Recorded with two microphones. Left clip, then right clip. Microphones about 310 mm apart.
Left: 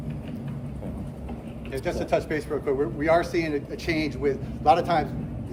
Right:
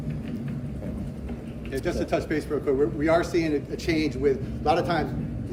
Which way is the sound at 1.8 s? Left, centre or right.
Centre.